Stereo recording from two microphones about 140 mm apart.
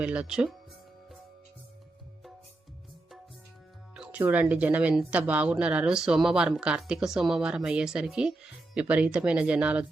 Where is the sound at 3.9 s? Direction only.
5° right (ahead or behind).